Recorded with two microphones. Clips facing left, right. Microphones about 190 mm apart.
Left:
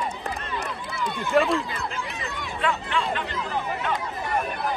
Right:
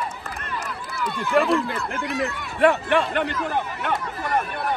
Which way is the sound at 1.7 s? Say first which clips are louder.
Right 5 dB; 65° right (ahead or behind).